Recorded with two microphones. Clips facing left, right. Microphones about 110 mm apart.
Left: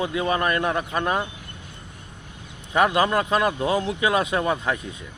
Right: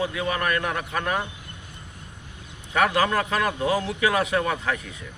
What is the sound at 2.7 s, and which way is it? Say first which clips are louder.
Speech: left 2 dB; 20° left (ahead or behind).